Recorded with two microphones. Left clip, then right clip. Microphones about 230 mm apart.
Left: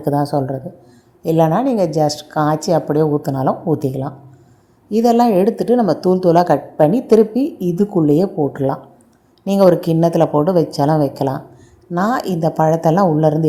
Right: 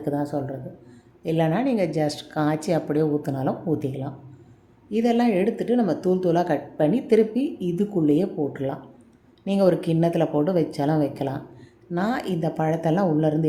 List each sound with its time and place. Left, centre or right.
0.3 s a woman's voice: left